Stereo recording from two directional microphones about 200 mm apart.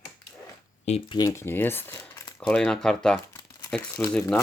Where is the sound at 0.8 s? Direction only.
30° left (ahead or behind).